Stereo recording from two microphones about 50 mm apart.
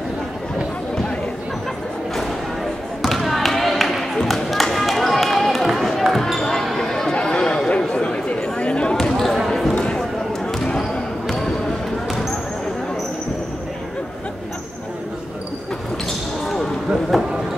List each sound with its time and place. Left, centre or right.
3.0 s music: centre
6.1 s basketball bounce: centre
9.1 s basketball bounce: centre
9.8 s a sound: centre
10.6 s basketball bounce: centre
16.4 s basketball bounce: centre
17.1 s a sound: centre